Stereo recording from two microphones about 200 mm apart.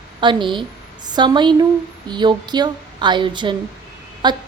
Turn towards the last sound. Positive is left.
turn(degrees=-20)  # may be behind; listen again after turning